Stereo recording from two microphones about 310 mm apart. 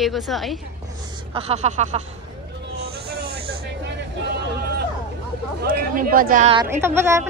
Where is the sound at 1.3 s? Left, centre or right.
Centre.